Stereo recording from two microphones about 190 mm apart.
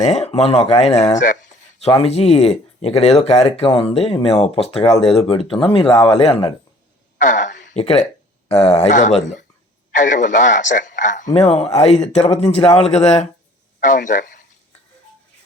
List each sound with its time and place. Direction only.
0.0 s speech: 35° left (ahead or behind)
7.2 s a woman's voice: 40° left (ahead or behind)